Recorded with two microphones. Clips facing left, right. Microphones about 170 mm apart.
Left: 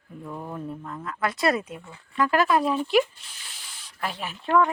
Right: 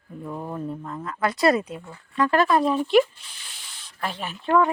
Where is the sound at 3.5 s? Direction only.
5° left (ahead or behind).